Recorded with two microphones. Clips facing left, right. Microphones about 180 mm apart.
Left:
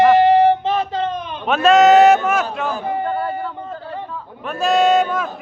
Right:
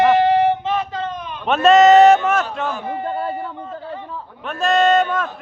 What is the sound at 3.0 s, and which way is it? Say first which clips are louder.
Speech: left 2 dB; 25° right (ahead or behind).